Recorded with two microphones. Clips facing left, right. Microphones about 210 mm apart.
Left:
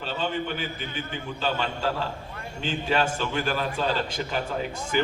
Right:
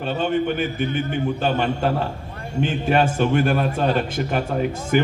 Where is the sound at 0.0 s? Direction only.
55° right (ahead or behind).